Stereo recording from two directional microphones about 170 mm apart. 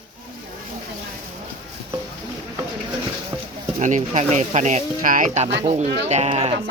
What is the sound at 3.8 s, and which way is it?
Speech, 45° right (ahead or behind).